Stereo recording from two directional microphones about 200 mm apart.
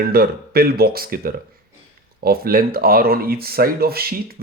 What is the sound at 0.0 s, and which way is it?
Speech, 50° right (ahead or behind).